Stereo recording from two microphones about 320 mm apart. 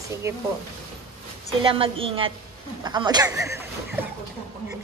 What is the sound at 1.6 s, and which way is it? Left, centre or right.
A woman's voice, centre.